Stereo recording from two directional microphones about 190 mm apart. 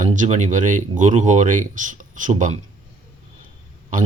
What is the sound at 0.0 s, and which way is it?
Speech, 40° right (ahead or behind).